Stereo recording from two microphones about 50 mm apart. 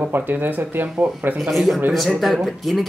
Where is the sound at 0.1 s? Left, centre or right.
Right.